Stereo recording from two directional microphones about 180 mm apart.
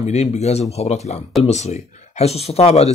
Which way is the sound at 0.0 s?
40° left (ahead or behind).